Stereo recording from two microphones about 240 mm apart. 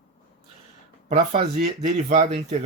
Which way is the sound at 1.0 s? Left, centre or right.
Right.